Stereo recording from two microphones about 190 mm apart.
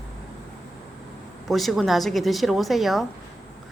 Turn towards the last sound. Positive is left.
turn(degrees=0)  # may be behind; listen again after turning